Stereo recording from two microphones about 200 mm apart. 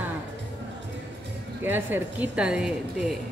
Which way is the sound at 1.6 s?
10° right (ahead or behind).